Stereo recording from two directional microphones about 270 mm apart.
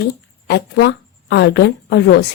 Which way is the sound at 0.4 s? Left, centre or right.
Left.